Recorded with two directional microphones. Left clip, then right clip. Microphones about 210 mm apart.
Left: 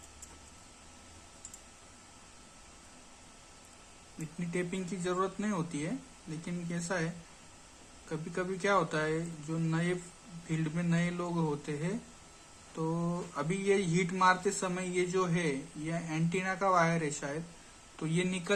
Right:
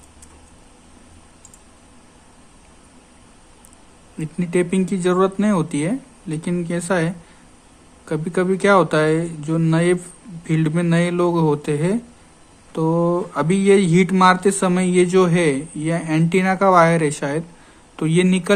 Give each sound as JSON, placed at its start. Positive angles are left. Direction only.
{"t": 4.4, "sound": "speech", "side_deg": -50}
{"t": 8.1, "sound": "speech", "side_deg": -50}